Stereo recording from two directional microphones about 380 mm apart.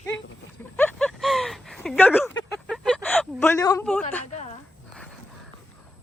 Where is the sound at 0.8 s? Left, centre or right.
Centre.